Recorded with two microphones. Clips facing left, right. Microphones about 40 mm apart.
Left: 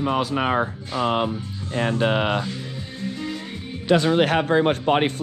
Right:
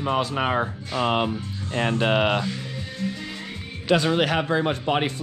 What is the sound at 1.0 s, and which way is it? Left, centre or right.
Speech, right.